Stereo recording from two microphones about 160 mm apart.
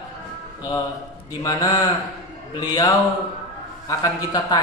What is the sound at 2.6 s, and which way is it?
Speech, 25° left (ahead or behind).